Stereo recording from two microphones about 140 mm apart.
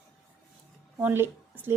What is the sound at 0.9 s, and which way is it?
Speech, 15° right (ahead or behind).